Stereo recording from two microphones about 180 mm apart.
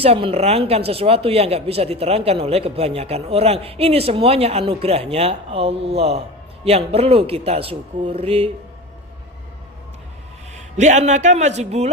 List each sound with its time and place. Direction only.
0.0 s speech: 30° right (ahead or behind)
10.5 s speech: 40° right (ahead or behind)